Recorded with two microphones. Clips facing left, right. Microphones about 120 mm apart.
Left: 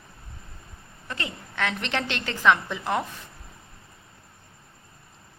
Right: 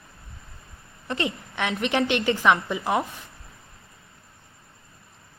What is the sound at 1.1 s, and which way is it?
A woman's voice, 20° right (ahead or behind).